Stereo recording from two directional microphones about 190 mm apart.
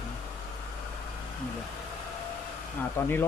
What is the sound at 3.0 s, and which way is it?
Speech, 10° left (ahead or behind).